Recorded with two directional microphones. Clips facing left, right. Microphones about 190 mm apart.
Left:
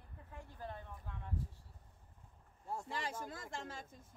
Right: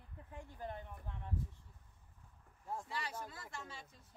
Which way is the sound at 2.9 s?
50° left (ahead or behind).